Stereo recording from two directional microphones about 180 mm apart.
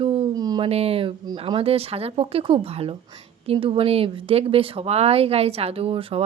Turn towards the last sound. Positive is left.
turn(degrees=-30)  # may be behind; listen again after turning